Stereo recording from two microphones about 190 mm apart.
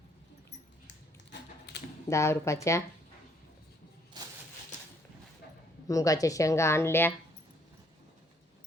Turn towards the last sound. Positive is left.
turn(degrees=10)  # may be behind; listen again after turning